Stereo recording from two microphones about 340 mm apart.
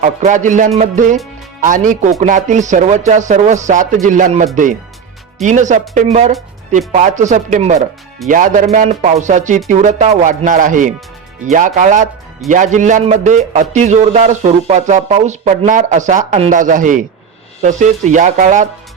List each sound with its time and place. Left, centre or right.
0.0 s a man's voice: right